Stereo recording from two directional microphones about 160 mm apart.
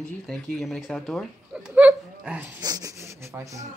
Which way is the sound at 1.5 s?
10° right (ahead or behind).